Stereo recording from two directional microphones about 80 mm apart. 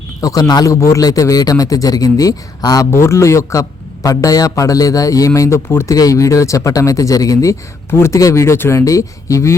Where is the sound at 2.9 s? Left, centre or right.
Left.